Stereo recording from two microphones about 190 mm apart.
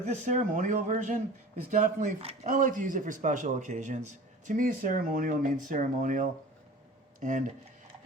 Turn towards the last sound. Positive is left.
turn(degrees=-40)  # may be behind; listen again after turning